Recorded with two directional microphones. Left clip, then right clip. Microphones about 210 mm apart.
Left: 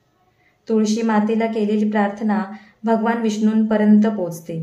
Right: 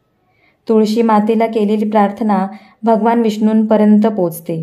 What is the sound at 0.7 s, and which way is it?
A woman's voice, 35° right (ahead or behind).